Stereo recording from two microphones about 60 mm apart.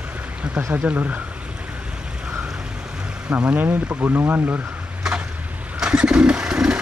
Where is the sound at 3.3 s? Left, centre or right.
Centre.